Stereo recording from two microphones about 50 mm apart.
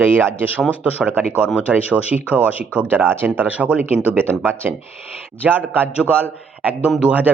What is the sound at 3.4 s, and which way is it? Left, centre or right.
Speech, right.